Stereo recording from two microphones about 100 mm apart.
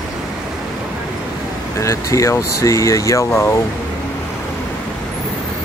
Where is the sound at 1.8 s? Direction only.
30° left (ahead or behind).